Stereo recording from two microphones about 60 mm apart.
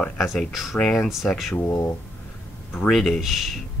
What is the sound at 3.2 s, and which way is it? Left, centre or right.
Speech, centre.